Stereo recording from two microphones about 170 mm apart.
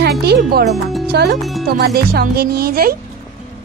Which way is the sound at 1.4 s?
Centre (ahead or behind).